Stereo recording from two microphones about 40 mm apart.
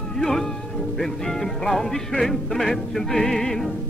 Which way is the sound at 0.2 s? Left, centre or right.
Centre.